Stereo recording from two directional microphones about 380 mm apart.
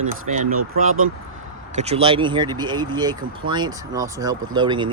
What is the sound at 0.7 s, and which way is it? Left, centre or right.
Speech, right.